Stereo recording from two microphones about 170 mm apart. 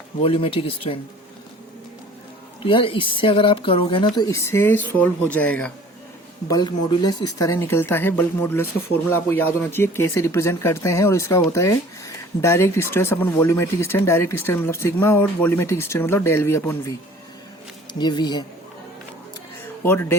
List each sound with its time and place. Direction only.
0.2 s speech: 35° left (ahead or behind)
2.6 s speech: 30° left (ahead or behind); by 5.7 s 5° left (ahead or behind)
6.5 s speech: 25° left (ahead or behind)
17.9 s speech: 25° left (ahead or behind)
19.8 s speech: 15° left (ahead or behind)